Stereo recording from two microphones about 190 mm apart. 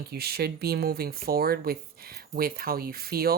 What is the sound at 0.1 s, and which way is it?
Speech, 55° right (ahead or behind).